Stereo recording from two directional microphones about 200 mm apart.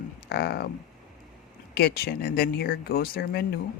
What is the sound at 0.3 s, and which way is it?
Speech, 55° left (ahead or behind).